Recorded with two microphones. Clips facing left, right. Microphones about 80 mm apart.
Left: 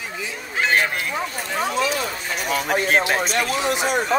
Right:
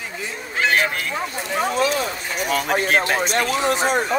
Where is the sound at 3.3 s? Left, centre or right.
Right.